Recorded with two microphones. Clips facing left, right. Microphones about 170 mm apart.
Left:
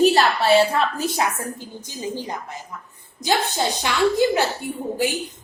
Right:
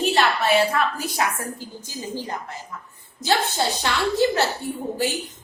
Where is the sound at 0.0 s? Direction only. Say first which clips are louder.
Left 4 dB; 35° left (ahead or behind); by 2.6 s 15° left (ahead or behind).